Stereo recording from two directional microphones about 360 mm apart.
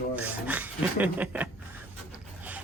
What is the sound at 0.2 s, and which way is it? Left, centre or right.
Speech, centre.